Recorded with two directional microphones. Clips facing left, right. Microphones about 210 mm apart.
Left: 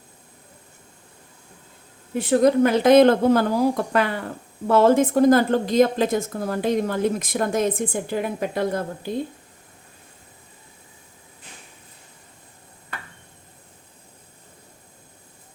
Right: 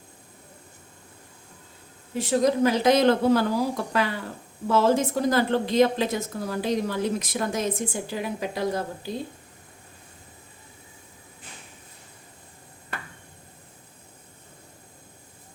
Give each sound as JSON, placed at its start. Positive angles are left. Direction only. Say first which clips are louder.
{"t": 2.1, "sound": "a woman's voice", "louder": "left 5 dB", "side_deg": 55}